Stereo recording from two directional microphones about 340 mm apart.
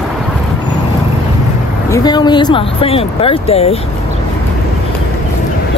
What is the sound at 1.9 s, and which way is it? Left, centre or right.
Speech, centre.